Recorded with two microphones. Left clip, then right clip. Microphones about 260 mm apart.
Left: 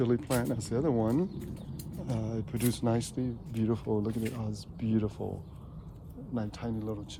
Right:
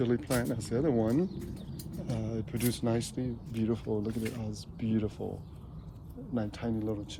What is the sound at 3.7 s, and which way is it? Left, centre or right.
Speech, left.